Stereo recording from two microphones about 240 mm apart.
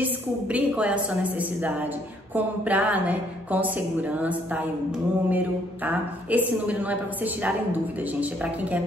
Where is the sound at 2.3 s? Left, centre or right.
Centre.